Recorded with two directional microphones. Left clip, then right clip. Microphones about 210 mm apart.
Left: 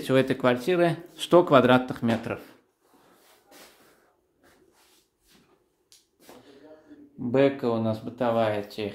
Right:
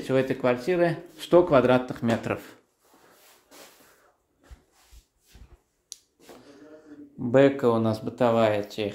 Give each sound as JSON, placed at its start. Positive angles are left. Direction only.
{"t": 0.0, "sound": "speech", "side_deg": 20}
{"t": 2.0, "sound": "speech", "side_deg": -10}
{"t": 5.9, "sound": "a sound", "side_deg": -50}
{"t": 7.2, "sound": "speech", "side_deg": -10}